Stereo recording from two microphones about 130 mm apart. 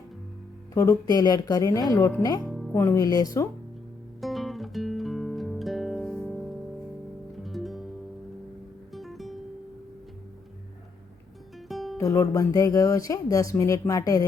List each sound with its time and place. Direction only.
0.7 s speech: 25° left (ahead or behind)
2.4 s music: centre (ahead or behind)
2.7 s speech: 25° left (ahead or behind)
4.2 s music: centre (ahead or behind)
8.9 s music: centre (ahead or behind)
11.7 s music: centre (ahead or behind)
11.9 s speech: 25° left (ahead or behind)